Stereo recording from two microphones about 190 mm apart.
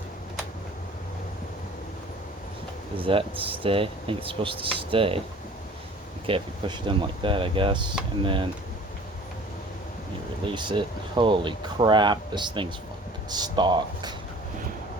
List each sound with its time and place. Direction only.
3.0 s speech: 30° right (ahead or behind)
6.2 s speech: 25° right (ahead or behind)
10.4 s speech: 25° right (ahead or behind)